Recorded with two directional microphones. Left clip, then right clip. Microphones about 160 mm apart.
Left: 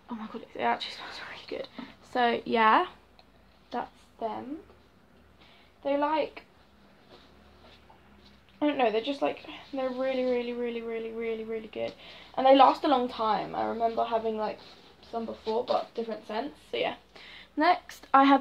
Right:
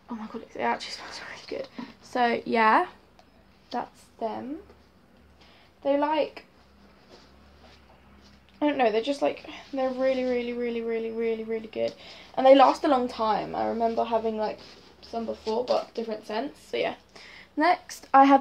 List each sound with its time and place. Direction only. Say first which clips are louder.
0.1 s a woman's voice: right 2 dB; 5° right (ahead or behind)
5.8 s speech: right 3 dB; 20° right (ahead or behind)
8.5 s speech: right 3 dB; 10° right (ahead or behind)
15.0 s speech: right 3 dB; 25° right (ahead or behind)
16.8 s a woman's voice: right 2 dB; 5° right (ahead or behind)